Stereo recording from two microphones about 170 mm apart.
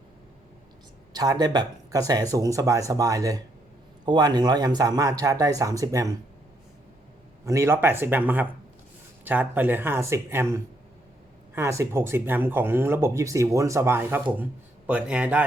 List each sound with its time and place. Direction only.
1.1 s speech: 25° right (ahead or behind)
7.4 s speech: 15° right (ahead or behind)